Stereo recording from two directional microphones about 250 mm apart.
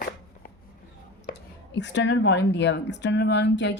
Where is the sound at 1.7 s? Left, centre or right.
Left.